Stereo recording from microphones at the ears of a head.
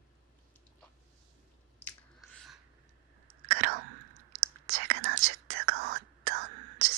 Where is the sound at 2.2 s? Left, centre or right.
Right.